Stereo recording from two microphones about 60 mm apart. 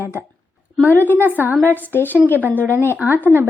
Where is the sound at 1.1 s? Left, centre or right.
Right.